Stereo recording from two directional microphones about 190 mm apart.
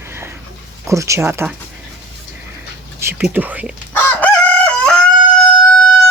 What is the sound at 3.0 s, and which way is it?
Speech, 15° right (ahead or behind).